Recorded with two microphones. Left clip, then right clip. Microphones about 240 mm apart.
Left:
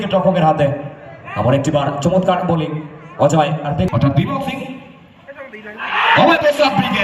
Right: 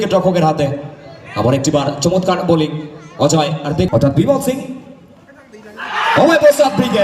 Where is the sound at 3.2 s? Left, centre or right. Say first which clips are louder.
Even; right.